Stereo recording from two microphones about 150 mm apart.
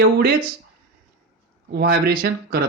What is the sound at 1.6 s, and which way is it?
Speech, 90° right.